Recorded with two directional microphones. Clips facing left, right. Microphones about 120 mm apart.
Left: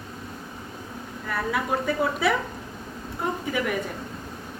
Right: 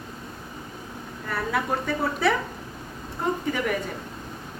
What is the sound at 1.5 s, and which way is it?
Speech, 5° left (ahead or behind).